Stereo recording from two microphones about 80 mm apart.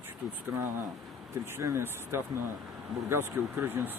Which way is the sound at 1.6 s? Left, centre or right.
Right.